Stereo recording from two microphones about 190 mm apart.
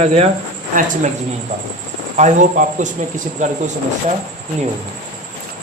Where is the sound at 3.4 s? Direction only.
40° right (ahead or behind).